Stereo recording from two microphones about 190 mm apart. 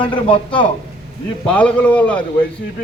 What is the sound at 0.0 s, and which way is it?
Speech, 25° left (ahead or behind).